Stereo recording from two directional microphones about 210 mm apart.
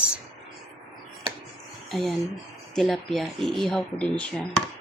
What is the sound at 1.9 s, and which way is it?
Speech, centre (ahead or behind).